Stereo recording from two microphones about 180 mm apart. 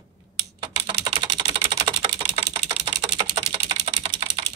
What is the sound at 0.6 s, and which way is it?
Typing, 25° right (ahead or behind).